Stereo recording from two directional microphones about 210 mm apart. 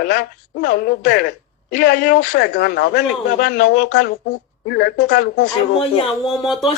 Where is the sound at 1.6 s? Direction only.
55° left (ahead or behind).